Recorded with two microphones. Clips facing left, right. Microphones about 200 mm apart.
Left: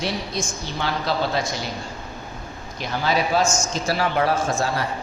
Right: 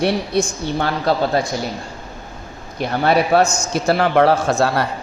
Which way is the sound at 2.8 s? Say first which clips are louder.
Right 6 dB; 60° right (ahead or behind).